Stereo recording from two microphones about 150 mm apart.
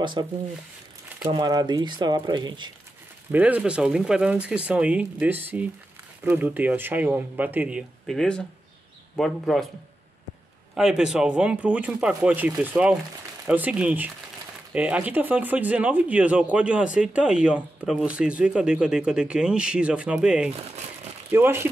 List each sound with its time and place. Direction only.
0.0 s speech: 30° right (ahead or behind)
1.3 s speech: 25° right (ahead or behind)
3.3 s speech: 10° right (ahead or behind)
8.1 s speech: 5° left (ahead or behind)
10.7 s speech: 5° right (ahead or behind)